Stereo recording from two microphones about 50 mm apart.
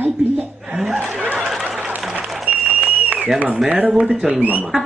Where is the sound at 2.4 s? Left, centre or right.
Right.